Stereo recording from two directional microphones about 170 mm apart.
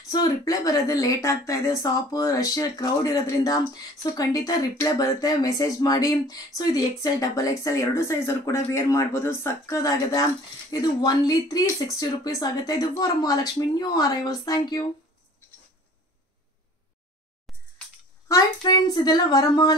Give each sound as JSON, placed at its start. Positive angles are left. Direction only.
{"t": 0.1, "sound": "a woman's voice", "side_deg": 20}
{"t": 17.5, "sound": "a sound", "side_deg": 0}
{"t": 18.3, "sound": "a woman's voice", "side_deg": 25}